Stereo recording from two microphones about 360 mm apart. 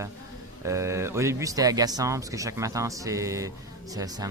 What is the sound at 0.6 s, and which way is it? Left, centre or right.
Speech, centre.